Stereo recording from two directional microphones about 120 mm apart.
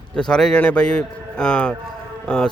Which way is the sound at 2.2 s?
5° left (ahead or behind).